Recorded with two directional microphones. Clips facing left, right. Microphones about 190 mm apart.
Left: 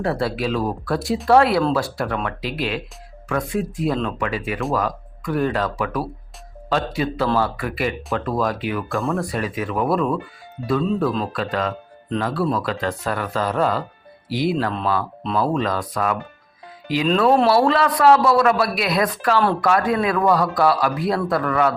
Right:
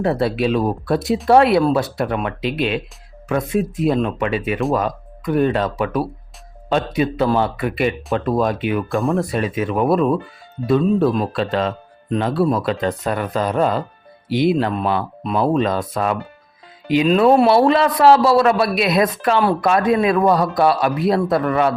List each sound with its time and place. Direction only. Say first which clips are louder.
0.0 s speech: right 4 dB; 20° right (ahead or behind)
11.3 s speech: right 4 dB; 25° right (ahead or behind)
17.5 s speech: right 3 dB; 25° right (ahead or behind)